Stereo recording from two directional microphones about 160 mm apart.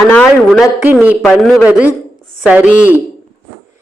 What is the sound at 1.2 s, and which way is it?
A man's voice, centre (ahead or behind).